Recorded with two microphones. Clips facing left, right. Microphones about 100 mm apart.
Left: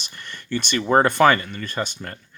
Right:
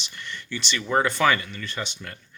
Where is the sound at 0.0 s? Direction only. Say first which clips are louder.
Right 1 dB; 45° left (ahead or behind).